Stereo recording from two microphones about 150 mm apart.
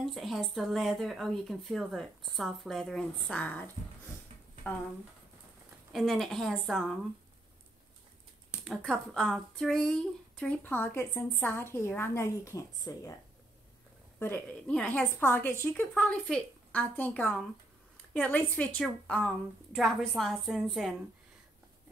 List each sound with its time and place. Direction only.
0.0 s speech: centre (ahead or behind)
5.9 s speech: centre (ahead or behind)
8.6 s speech: 5° left (ahead or behind); by 13.0 s 20° left (ahead or behind)
14.2 s speech: 10° left (ahead or behind)